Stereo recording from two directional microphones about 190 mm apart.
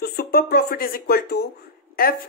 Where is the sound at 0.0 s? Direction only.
55° left (ahead or behind).